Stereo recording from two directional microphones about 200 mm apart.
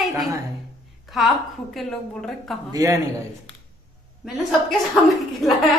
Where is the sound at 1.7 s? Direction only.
Centre (ahead or behind).